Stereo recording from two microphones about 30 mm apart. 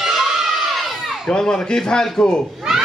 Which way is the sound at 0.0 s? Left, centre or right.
Centre.